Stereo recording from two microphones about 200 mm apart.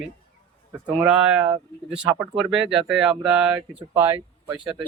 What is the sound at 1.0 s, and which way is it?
Speech, 5° right (ahead or behind).